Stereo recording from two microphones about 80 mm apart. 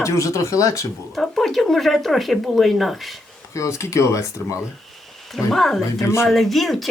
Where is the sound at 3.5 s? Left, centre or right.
Left.